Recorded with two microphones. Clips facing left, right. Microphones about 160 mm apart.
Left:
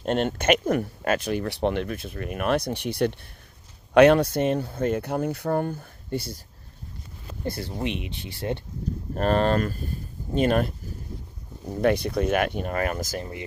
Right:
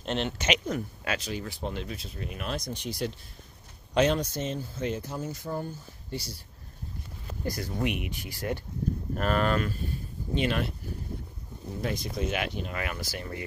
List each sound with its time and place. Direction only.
0.0 s speech: 50° left (ahead or behind)
7.4 s speech: 25° left (ahead or behind)
9.1 s speech: 35° left (ahead or behind)
11.8 s speech: 65° left (ahead or behind); by 13.2 s 45° left (ahead or behind)